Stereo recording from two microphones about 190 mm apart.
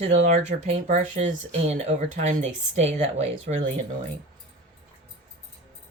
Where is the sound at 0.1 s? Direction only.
40° right (ahead or behind).